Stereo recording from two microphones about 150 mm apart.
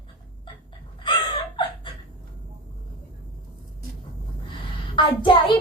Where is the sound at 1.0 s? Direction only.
35° left (ahead or behind).